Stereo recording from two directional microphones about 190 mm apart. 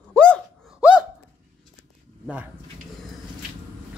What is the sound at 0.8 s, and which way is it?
Hiccup, 5° right (ahead or behind).